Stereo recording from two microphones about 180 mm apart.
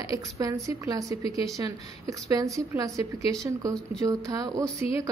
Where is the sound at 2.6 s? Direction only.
20° right (ahead or behind).